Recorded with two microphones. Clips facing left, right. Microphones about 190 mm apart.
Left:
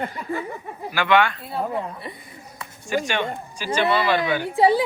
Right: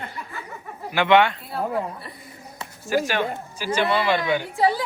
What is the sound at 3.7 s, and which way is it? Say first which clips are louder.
Speech: left 1 dB; 15° right (ahead or behind).